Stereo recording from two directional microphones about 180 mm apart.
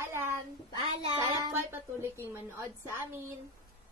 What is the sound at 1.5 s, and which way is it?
A woman's voice, 15° right (ahead or behind).